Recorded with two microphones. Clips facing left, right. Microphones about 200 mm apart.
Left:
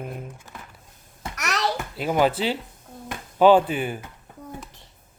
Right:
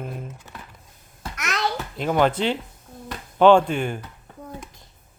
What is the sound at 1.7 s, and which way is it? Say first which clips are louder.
Speech: right 2 dB; 10° left (ahead or behind).